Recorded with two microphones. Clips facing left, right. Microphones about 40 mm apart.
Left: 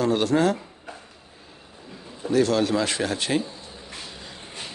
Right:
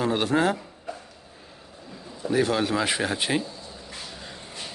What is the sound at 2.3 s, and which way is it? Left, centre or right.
Speech, centre.